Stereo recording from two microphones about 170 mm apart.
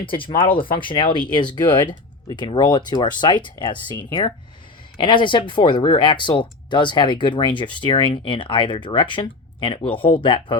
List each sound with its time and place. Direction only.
0.2 s speech: 30° left (ahead or behind)